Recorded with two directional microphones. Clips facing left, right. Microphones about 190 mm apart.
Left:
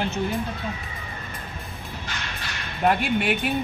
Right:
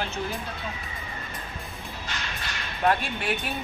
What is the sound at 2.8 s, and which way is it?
Speech, 10° left (ahead or behind).